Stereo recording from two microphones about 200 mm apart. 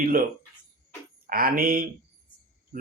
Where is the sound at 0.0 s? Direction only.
45° right (ahead or behind).